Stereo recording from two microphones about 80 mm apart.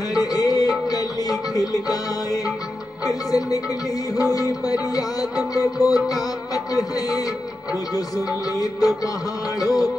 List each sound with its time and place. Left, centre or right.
0.1 s music: left